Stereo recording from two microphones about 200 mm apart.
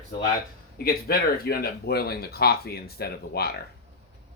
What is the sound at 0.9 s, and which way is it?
Speech, 50° left (ahead or behind).